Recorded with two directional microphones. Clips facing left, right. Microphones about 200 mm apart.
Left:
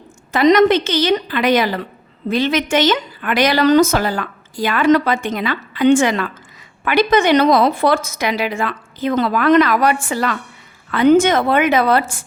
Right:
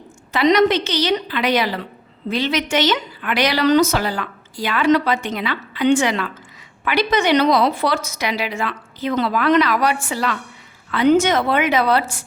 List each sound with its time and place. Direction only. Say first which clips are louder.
0.3 s a woman's voice: left 3 dB; 45° left (ahead or behind)